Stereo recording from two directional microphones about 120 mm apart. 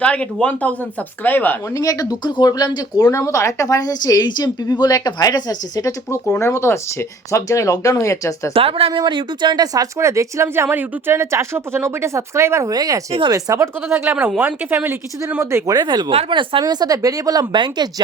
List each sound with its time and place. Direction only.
0.0 s speech: 10° left (ahead or behind)
1.7 s speech: 30° left (ahead or behind)
8.5 s speech: 55° right (ahead or behind)
8.9 s speech: 40° right (ahead or behind); by 15.7 s 20° right (ahead or behind)
15.7 s speech: 35° right (ahead or behind)